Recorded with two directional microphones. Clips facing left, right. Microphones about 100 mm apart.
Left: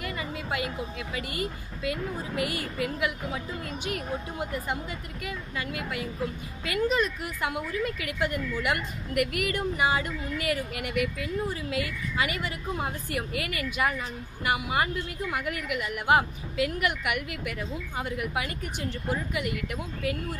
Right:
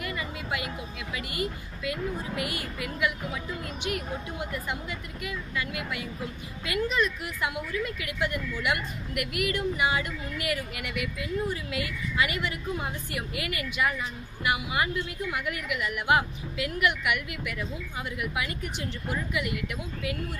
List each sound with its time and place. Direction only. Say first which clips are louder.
0.0 s a woman's voice: left 1 dB; 35° left (ahead or behind)